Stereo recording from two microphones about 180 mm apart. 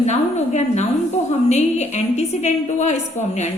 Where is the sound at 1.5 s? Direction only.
40° left (ahead or behind).